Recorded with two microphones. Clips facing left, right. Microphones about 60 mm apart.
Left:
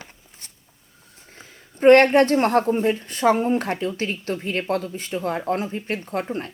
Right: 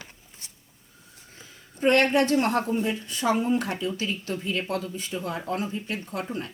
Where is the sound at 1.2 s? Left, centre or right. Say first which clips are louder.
Left 4 dB; left.